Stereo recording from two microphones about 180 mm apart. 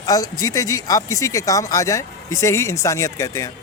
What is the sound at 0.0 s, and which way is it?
Speech, 20° left (ahead or behind).